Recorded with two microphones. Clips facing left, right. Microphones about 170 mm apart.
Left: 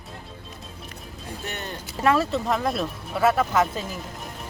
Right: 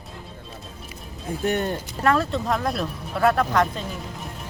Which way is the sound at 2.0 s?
5° left (ahead or behind).